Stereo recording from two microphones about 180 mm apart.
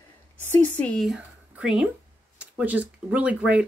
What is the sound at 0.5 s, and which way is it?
A woman's voice, 5° left (ahead or behind).